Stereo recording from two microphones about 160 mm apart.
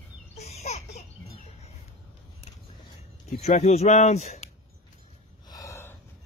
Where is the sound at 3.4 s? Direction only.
45° left (ahead or behind).